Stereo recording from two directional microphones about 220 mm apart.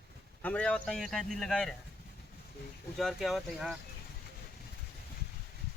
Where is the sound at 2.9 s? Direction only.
Centre (ahead or behind).